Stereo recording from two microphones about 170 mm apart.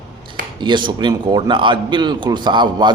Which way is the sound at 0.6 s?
25° right (ahead or behind).